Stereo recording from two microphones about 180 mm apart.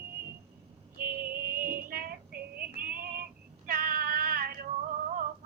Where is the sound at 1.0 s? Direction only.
55° right (ahead or behind).